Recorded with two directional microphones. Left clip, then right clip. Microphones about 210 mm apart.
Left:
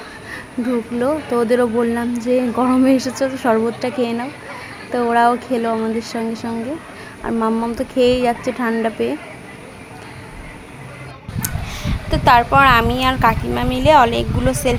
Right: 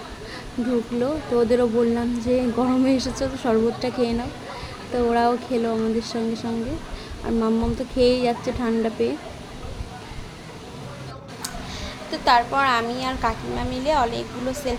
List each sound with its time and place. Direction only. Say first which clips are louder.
0.9 s speech: left 4 dB; 15° left (ahead or behind)
11.4 s speech: left 5 dB; 40° left (ahead or behind)